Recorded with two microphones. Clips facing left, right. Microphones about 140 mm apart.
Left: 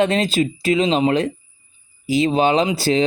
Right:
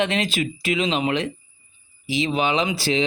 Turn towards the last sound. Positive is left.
turn(degrees=40)  # may be behind; listen again after turning